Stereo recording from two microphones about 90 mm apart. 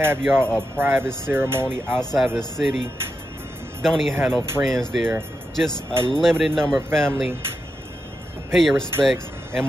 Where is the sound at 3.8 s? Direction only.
Centre (ahead or behind).